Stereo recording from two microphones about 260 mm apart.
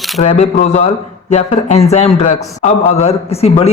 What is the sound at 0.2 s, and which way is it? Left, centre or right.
Speech, left.